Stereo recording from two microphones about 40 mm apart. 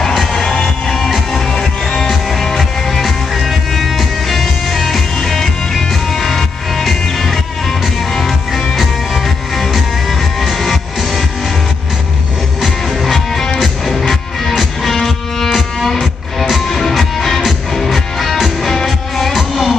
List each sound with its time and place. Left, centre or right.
0.3 s music: centre
12.6 s music: centre